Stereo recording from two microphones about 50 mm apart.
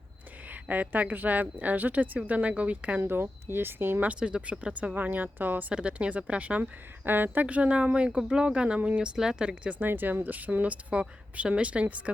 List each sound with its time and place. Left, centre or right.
0.4 s speech: right
3.0 s speech: right
4.2 s speech: right
5.7 s speech: right
7.0 s speech: right
7.4 s speech: right
9.7 s speech: right